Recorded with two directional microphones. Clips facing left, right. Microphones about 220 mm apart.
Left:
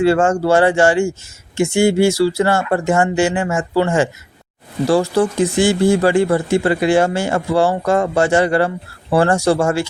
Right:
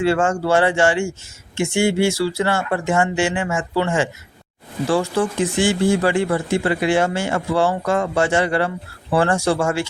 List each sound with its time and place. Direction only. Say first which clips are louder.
0.0 s speech: left 4 dB; 40° left (ahead or behind)